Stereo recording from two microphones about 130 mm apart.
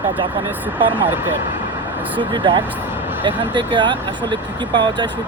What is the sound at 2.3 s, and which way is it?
Speech, 40° right (ahead or behind).